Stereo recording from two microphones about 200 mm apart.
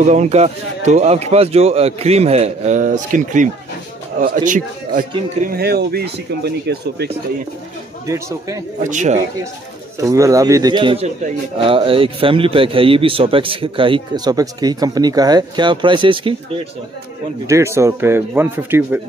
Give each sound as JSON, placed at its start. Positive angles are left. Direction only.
{"t": 0.0, "sound": "a man's voice", "side_deg": -35}
{"t": 8.1, "sound": "speech", "side_deg": -15}
{"t": 8.8, "sound": "a man's voice", "side_deg": -40}
{"t": 9.9, "sound": "a man's voice", "side_deg": -15}
{"t": 17.5, "sound": "speech", "side_deg": -15}